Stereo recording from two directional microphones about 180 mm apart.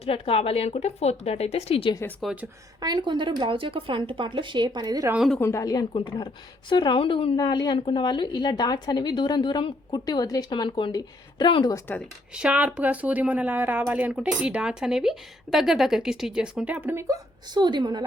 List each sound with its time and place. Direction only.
0.0 s speech: 30° left (ahead or behind)
2.2 s speech: 10° right (ahead or behind)
2.8 s speech: 25° right (ahead or behind)
5.1 s a woman's voice: centre (ahead or behind)
5.4 s a woman's voice: 15° left (ahead or behind)
12.3 s speech: 5° right (ahead or behind); by 18.0 s 25° right (ahead or behind)